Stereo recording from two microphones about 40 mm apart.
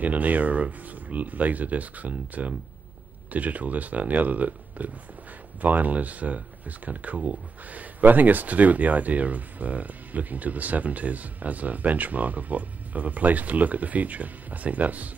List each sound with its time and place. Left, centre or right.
0.0 s speech: right